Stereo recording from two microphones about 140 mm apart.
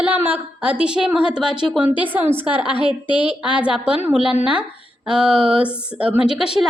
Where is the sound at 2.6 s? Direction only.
35° left (ahead or behind).